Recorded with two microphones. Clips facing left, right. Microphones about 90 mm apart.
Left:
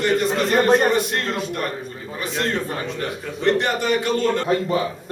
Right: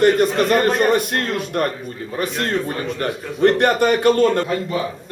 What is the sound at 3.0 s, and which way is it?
A man's voice, 50° right (ahead or behind).